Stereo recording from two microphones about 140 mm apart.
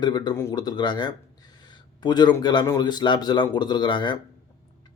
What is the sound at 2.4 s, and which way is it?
Speech, 30° left (ahead or behind).